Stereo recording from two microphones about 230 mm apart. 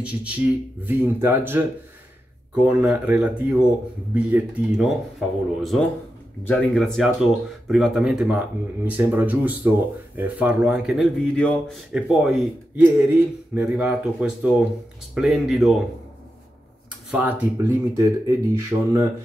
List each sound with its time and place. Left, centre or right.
0.8 s speech: centre
17.1 s speech: centre